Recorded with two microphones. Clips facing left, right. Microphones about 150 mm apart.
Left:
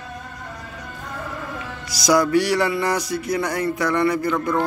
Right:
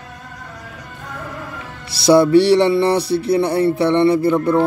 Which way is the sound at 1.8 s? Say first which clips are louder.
Right 6 dB; 30° right (ahead or behind).